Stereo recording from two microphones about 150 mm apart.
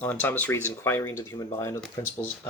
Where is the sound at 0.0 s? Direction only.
10° left (ahead or behind).